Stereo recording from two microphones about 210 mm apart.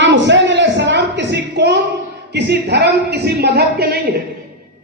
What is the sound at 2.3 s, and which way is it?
A woman's voice, 50° right (ahead or behind).